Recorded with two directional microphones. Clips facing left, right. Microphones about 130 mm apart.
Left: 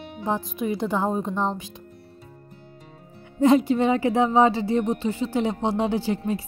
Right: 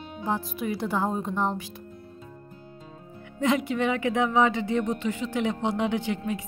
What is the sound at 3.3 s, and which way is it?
Speech, 35° left (ahead or behind).